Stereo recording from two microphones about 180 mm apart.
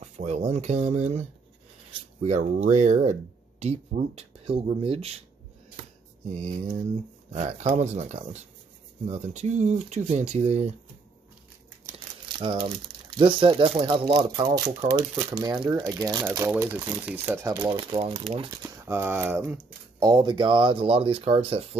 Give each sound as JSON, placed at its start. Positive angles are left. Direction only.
{"t": 0.0, "sound": "speech", "side_deg": -40}
{"t": 6.3, "sound": "speech", "side_deg": -40}
{"t": 12.4, "sound": "speech", "side_deg": -30}
{"t": 14.9, "sound": "speech", "side_deg": -20}
{"t": 17.6, "sound": "speech", "side_deg": -25}
{"t": 18.9, "sound": "speech", "side_deg": -15}